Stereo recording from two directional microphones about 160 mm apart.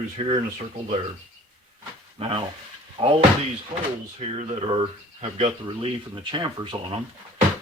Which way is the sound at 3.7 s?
40° right (ahead or behind).